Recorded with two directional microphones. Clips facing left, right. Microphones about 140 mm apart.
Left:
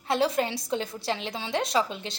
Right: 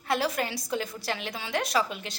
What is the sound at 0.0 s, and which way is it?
A woman's voice, 25° left (ahead or behind).